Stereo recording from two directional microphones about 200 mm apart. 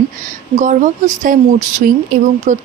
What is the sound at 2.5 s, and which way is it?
Speech, 40° right (ahead or behind).